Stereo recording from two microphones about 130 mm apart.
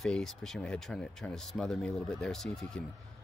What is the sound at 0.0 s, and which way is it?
Speech, 5° left (ahead or behind).